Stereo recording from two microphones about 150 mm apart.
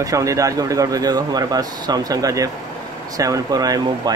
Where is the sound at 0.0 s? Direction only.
20° right (ahead or behind).